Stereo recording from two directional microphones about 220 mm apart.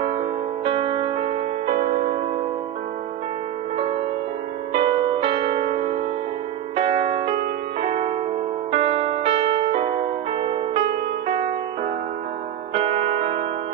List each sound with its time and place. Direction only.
0.0 s music: 25° right (ahead or behind)
4.7 s music: 25° right (ahead or behind)
12.7 s music: 25° right (ahead or behind)